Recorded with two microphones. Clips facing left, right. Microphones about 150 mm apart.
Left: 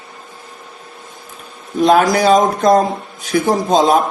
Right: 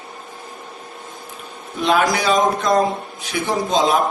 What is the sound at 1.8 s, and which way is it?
A man's voice, 40° left (ahead or behind).